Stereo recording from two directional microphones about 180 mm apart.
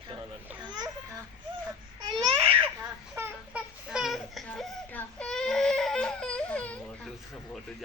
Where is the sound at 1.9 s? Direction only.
25° right (ahead or behind).